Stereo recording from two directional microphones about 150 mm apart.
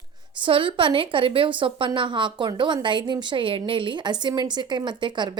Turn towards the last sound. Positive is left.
turn(degrees=-30)  # may be behind; listen again after turning